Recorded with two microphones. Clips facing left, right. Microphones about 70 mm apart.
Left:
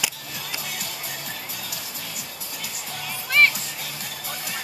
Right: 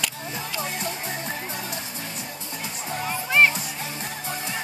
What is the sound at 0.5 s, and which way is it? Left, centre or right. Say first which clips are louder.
Music: right 7 dB; right.